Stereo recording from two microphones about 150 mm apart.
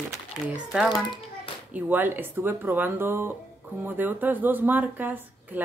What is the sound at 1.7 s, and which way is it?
Speech, 15° right (ahead or behind).